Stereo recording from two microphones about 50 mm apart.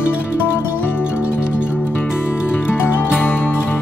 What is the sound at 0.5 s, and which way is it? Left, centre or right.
Music, left.